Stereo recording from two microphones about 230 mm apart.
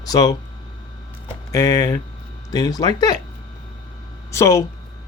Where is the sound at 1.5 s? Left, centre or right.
Centre.